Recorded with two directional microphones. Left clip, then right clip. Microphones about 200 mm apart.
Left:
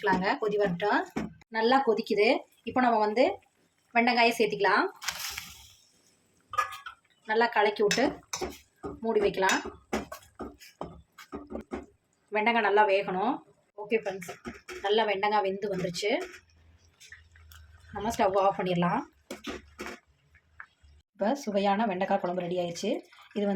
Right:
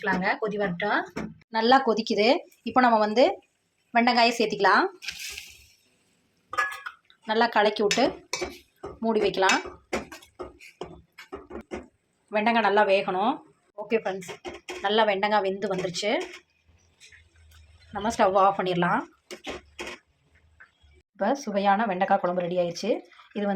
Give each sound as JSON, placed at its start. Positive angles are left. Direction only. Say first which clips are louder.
{"t": 0.0, "sound": "speech", "louder": "right 1 dB", "side_deg": 25}
{"t": 1.5, "sound": "speech", "louder": "right 4 dB", "side_deg": -10}
{"t": 7.3, "sound": "speech", "louder": "right 3 dB", "side_deg": -10}
{"t": 12.3, "sound": "speech", "louder": "right 3 dB", "side_deg": -5}
{"t": 18.0, "sound": "speech", "louder": "right 4 dB", "side_deg": 0}
{"t": 21.2, "sound": "speech", "louder": "right 2 dB", "side_deg": -5}